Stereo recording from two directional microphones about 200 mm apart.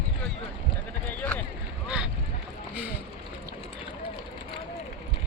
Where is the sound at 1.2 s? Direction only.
5° left (ahead or behind).